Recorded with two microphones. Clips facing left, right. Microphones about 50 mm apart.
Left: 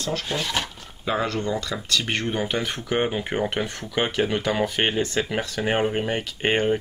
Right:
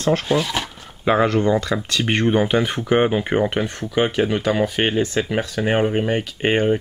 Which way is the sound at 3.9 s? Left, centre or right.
Centre.